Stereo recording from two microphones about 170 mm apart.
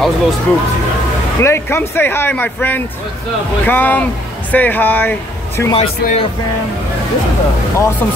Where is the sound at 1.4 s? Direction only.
15° left (ahead or behind).